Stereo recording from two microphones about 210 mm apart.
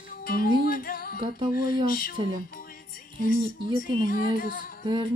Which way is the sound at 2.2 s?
20° right (ahead or behind).